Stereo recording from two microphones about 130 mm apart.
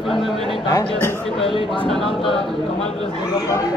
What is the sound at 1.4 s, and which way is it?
Speech, 45° left (ahead or behind).